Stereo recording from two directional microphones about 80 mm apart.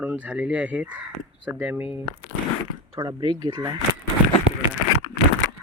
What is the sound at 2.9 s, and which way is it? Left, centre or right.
Speech, right.